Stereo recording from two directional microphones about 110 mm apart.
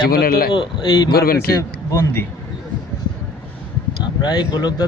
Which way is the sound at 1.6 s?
25° left (ahead or behind).